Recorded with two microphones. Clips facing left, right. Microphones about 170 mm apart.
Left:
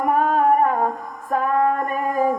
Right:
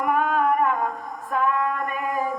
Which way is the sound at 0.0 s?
40° left (ahead or behind).